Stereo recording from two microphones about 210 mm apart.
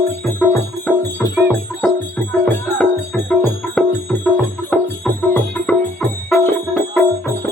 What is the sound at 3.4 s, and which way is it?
Music, centre (ahead or behind).